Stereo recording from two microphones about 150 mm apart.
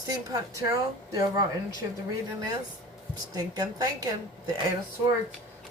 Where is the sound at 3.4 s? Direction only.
25° right (ahead or behind).